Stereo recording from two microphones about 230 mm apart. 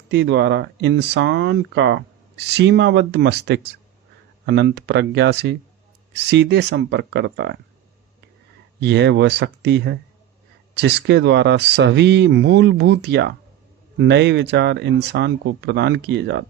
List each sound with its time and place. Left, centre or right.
0.1 s speech: right
8.8 s speech: right